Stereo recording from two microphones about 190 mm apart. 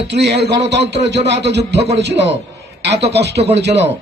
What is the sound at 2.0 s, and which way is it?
A man's voice, 65° right (ahead or behind).